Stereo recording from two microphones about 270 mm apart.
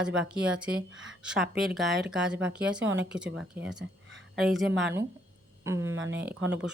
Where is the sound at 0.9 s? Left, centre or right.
Right.